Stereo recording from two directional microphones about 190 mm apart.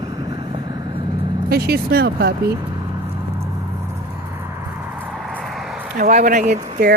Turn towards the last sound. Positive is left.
turn(degrees=-40)  # may be behind; listen again after turning